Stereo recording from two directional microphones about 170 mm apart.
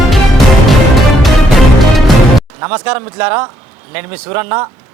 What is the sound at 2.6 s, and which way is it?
A man's voice, 15° right (ahead or behind).